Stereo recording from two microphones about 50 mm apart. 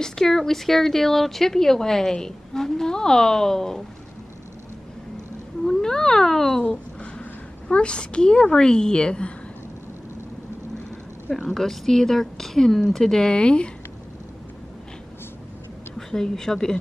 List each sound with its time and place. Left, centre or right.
0.0 s a woman's voice: centre
5.7 s a woman's voice: centre
11.3 s a woman's voice: centre
16.1 s a woman's voice: centre